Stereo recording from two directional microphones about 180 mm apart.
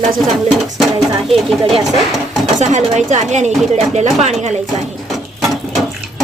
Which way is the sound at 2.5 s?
40° right (ahead or behind).